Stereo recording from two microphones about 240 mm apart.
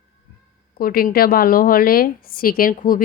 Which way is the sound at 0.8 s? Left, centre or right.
Left.